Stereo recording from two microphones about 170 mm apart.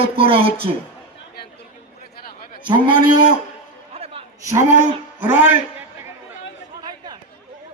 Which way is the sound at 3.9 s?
35° right (ahead or behind).